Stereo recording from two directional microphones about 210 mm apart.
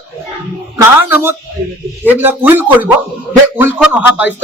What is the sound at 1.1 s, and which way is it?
Speech, 10° right (ahead or behind).